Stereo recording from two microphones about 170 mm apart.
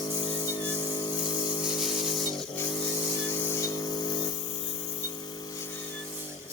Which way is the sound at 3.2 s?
15° left (ahead or behind).